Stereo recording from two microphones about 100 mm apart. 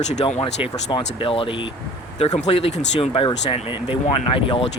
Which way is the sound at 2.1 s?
90° left.